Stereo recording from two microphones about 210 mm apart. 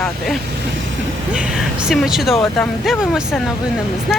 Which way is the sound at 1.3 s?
Centre (ahead or behind).